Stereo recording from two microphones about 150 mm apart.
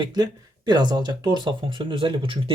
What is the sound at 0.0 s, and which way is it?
Speech, 30° right (ahead or behind).